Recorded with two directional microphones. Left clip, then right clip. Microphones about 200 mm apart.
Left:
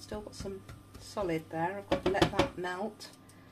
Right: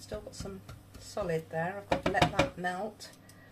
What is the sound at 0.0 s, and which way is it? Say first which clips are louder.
Speech: even; 25° left (ahead or behind).